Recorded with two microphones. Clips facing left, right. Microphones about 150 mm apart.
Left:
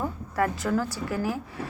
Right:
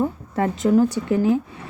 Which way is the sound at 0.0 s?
25° right (ahead or behind).